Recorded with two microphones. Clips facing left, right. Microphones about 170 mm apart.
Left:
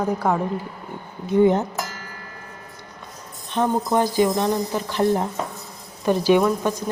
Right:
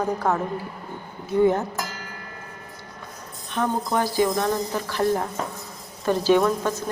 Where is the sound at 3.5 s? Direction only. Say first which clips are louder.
Left 4 dB; 20° left (ahead or behind).